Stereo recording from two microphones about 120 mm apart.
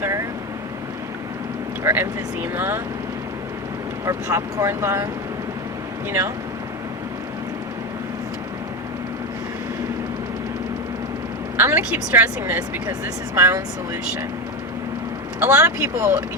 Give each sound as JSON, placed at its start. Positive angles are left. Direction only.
{"t": 0.0, "sound": "vehicle", "side_deg": -25}
{"t": 1.8, "sound": "speech", "side_deg": -20}
{"t": 4.0, "sound": "speech", "side_deg": -25}
{"t": 6.1, "sound": "speech", "side_deg": -20}
{"t": 11.5, "sound": "speech", "side_deg": -20}
{"t": 15.4, "sound": "speech", "side_deg": -25}